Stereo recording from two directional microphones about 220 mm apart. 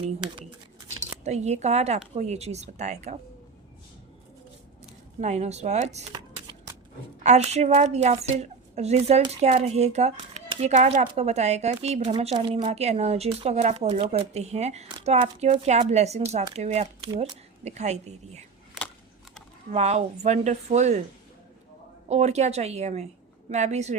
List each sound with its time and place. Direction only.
1.2 s speech: 30° right (ahead or behind)
5.2 s a woman's voice: 30° right (ahead or behind)
19.7 s speech: 30° right (ahead or behind)
22.1 s speech: 30° right (ahead or behind)